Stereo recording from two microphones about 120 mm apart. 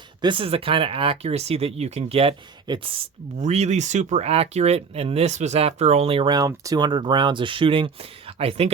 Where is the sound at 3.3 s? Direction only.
70° right (ahead or behind).